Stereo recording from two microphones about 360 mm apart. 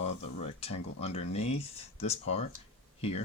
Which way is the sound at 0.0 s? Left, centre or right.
Left.